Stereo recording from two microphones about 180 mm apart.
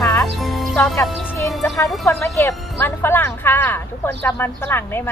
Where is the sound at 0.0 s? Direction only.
20° left (ahead or behind).